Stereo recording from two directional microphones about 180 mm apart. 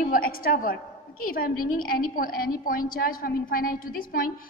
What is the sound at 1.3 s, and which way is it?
A woman's voice, 55° left (ahead or behind).